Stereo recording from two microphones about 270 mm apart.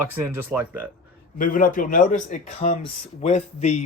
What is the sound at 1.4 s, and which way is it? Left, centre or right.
Speech, left.